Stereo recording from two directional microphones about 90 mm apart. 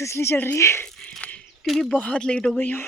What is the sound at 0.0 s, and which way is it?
Speech, 30° left (ahead or behind).